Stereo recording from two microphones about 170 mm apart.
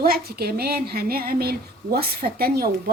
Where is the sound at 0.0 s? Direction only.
60° right (ahead or behind).